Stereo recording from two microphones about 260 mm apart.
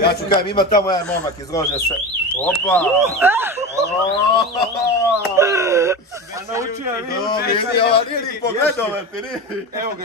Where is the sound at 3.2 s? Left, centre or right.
Centre.